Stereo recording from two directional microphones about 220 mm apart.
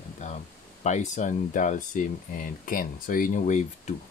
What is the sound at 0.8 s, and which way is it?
Speech, 35° left (ahead or behind).